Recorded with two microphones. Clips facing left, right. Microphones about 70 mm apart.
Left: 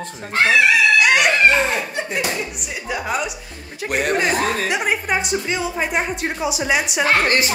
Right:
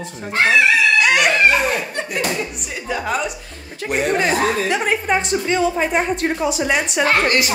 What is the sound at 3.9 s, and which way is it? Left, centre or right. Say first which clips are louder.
Speech: right 1 dB; left.